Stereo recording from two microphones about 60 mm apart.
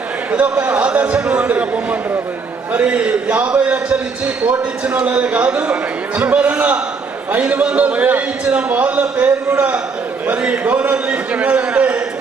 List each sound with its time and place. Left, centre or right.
0.3 s a man's voice: right